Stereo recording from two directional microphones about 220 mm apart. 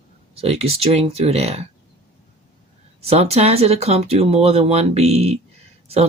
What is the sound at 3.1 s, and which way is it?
Speech, 30° right (ahead or behind).